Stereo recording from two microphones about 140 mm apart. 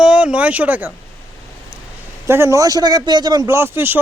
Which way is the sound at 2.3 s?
20° right (ahead or behind).